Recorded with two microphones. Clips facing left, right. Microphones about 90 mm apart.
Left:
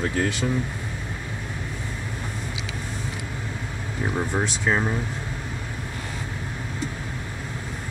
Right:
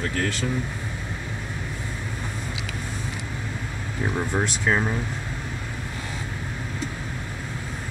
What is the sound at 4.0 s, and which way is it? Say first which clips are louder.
Speech: even; 5° left (ahead or behind).